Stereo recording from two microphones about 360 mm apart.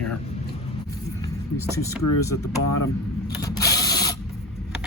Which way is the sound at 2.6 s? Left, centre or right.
Left.